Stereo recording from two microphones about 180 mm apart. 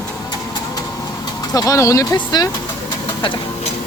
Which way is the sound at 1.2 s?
20° left (ahead or behind).